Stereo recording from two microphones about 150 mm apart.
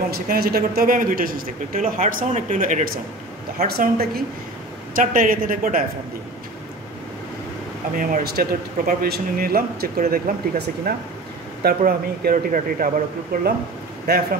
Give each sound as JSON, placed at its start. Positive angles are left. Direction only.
{"t": 0.1, "sound": "speech", "side_deg": -90}
{"t": 3.6, "sound": "a woman's voice", "side_deg": -90}
{"t": 4.9, "sound": "speech", "side_deg": -65}
{"t": 7.9, "sound": "speech", "side_deg": -70}
{"t": 10.9, "sound": "a woman's voice", "side_deg": -90}
{"t": 13.3, "sound": "a woman's voice", "side_deg": -90}